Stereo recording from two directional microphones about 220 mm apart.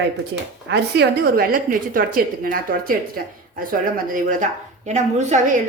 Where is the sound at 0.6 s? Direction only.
50° right (ahead or behind).